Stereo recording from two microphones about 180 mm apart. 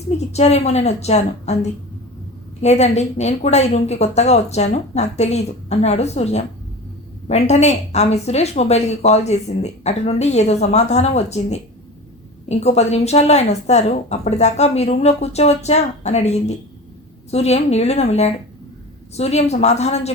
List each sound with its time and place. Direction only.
0.3 s speech: 35° left (ahead or behind)
2.6 s speech: 40° left (ahead or behind)